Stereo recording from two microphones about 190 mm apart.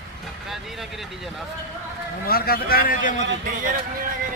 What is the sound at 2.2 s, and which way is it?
A man's voice, 50° left (ahead or behind).